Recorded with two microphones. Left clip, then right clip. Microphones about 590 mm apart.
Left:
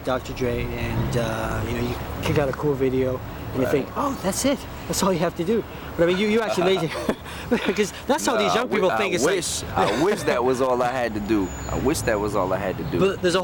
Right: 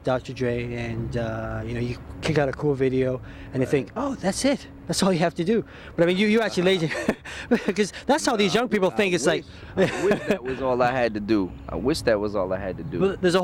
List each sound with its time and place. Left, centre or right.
0.0 s speech: right
10.7 s speech: right